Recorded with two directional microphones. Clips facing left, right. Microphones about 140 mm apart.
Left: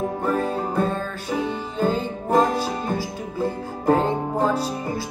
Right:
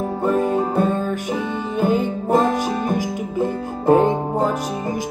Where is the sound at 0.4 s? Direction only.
15° right (ahead or behind).